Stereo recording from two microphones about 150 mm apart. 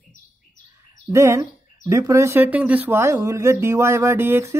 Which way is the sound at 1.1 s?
20° right (ahead or behind).